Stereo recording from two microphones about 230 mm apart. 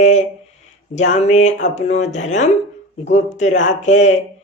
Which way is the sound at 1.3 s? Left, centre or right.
Left.